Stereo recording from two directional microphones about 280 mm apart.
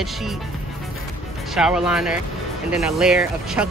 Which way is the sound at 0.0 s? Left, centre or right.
Centre.